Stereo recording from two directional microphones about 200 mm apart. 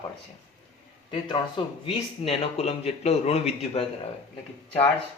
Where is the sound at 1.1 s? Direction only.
25° left (ahead or behind).